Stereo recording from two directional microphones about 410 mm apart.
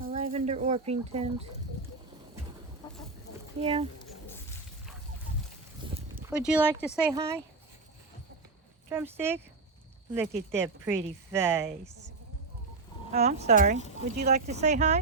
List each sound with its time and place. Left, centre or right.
0.0 s speech: centre
2.8 s chicken: centre
3.6 s speech: centre
5.8 s a sound: centre
6.3 s speech: centre
8.9 s speech: centre
13.1 s speech: centre